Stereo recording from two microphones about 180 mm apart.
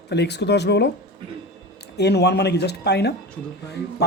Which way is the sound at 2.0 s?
65° left (ahead or behind).